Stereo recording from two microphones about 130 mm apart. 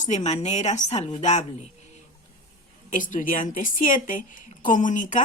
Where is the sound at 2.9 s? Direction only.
80° left.